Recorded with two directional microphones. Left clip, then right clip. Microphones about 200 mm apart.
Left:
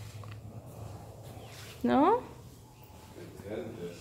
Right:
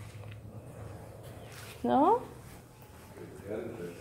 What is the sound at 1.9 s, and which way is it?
Speech, 15° left (ahead or behind).